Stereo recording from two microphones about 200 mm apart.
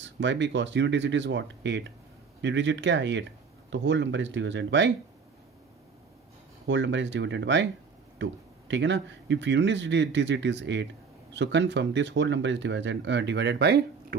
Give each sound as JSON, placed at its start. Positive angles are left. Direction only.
{"t": 0.0, "sound": "speech", "side_deg": -65}
{"t": 6.7, "sound": "speech", "side_deg": -65}